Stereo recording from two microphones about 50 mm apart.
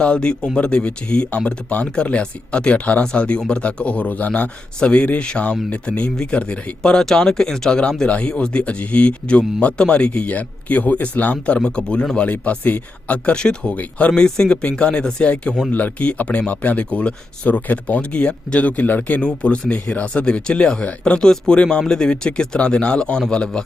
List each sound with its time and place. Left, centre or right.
0.0 s speech: centre
13.3 s speech: centre
14.2 s speech: centre